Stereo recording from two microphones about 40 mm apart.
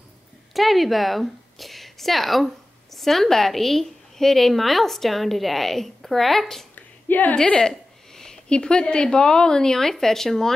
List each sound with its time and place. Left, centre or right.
0.5 s a woman's voice: centre
6.7 s a sound: left
8.5 s speech: left